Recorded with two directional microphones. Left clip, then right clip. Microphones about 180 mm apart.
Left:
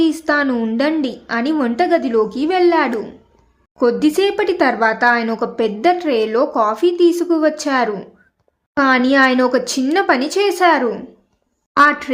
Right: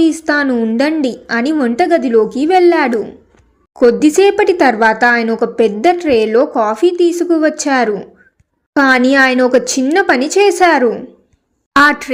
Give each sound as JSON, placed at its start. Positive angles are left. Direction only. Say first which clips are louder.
{"t": 0.0, "sound": "a woman's voice", "louder": "right 3 dB", "side_deg": -15}